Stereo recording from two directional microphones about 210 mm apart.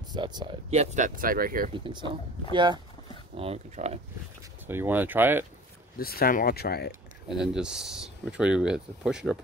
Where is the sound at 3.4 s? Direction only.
30° right (ahead or behind).